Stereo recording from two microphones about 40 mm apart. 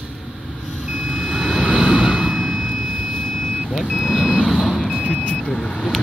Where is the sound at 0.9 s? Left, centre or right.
Centre.